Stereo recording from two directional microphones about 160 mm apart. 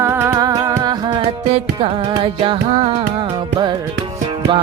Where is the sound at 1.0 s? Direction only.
35° right (ahead or behind).